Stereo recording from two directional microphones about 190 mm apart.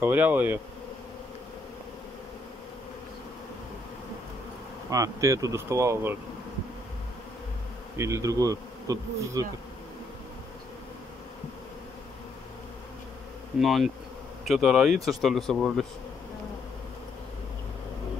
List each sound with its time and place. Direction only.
0.0 s bee: 10° right (ahead or behind)
4.9 s bee: 15° right (ahead or behind)
8.0 s bee: 15° right (ahead or behind)
13.6 s speech: centre (ahead or behind)